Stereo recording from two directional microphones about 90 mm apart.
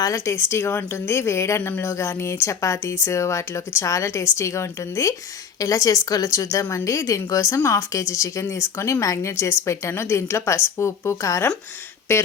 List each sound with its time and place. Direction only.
0.0 s a woman's voice: 35° left (ahead or behind)